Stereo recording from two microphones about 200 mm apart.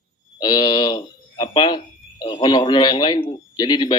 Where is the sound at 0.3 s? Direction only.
20° left (ahead or behind).